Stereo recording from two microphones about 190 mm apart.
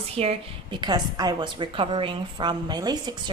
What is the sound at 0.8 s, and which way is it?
A woman's voice, 20° right (ahead or behind).